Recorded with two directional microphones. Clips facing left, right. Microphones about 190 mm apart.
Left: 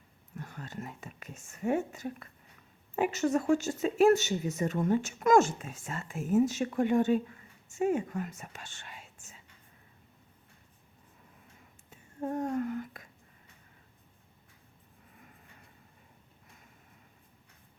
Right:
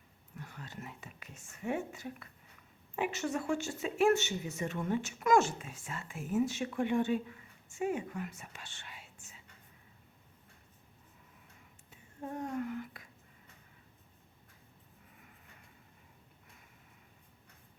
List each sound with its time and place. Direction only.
0.3 s speech: 45° left (ahead or behind)
12.2 s speech: 45° left (ahead or behind)